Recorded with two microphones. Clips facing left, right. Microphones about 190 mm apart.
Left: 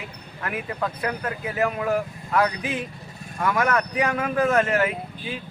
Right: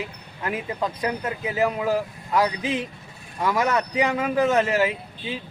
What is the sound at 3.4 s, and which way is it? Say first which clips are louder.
Speech: even; 15° right (ahead or behind).